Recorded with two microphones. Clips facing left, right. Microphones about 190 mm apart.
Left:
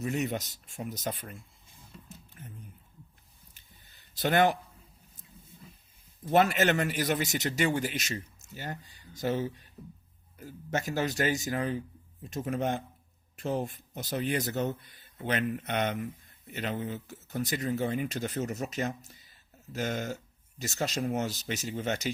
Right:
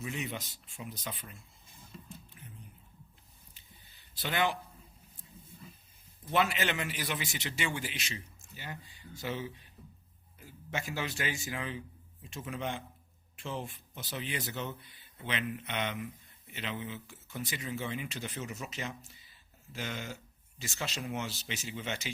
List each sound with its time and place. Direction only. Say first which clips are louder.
0.0 s a man's voice: left 7 dB; 45° left (ahead or behind)
2.4 s a sound: left 4 dB; 45° left (ahead or behind)
6.3 s a man's voice: left 7 dB; 45° left (ahead or behind)